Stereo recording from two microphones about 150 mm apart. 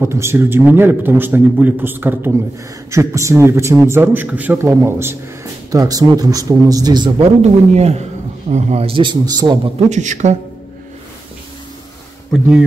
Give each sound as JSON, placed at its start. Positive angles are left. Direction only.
{"t": 0.0, "sound": "a man's voice", "side_deg": -15}
{"t": 7.4, "sound": "a man's voice", "side_deg": -45}
{"t": 9.8, "sound": "a man's voice", "side_deg": -50}
{"t": 12.3, "sound": "speech", "side_deg": -5}